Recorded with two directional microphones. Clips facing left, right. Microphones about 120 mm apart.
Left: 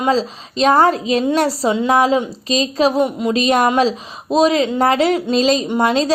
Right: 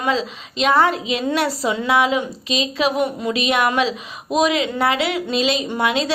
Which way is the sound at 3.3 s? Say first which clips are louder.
Left 5 dB; 40° left (ahead or behind).